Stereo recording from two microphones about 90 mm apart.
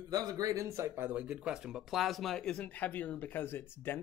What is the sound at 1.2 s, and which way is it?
Speech, 10° right (ahead or behind).